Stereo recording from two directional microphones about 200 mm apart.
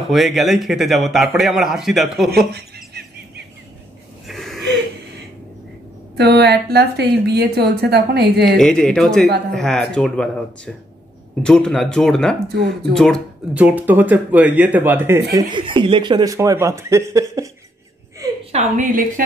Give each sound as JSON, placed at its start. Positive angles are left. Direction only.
{"t": 0.0, "sound": "a man's voice", "side_deg": 0}
{"t": 2.5, "sound": "bird", "side_deg": -50}
{"t": 4.3, "sound": "a sound", "side_deg": 0}
{"t": 6.1, "sound": "a woman's voice", "side_deg": -55}
{"t": 8.5, "sound": "a man's voice", "side_deg": 0}
{"t": 15.3, "sound": "speech", "side_deg": -25}
{"t": 18.4, "sound": "a woman's voice", "side_deg": -35}